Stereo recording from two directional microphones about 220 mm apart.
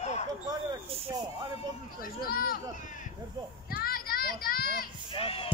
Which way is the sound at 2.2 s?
40° left (ahead or behind).